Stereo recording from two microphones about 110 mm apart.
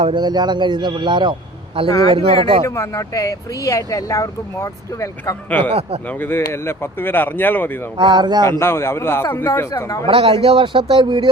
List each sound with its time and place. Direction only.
0.1 s a man's voice: 40° right (ahead or behind)
1.9 s speech: 35° left (ahead or behind)
2.1 s speech: 55° right (ahead or behind)
2.6 s speech: 25° left (ahead or behind)
5.5 s speech: 15° left (ahead or behind)
7.9 s speech: 40° right (ahead or behind)
8.4 s a man's voice: 25° left (ahead or behind)
10.1 s a man's voice: 60° right (ahead or behind)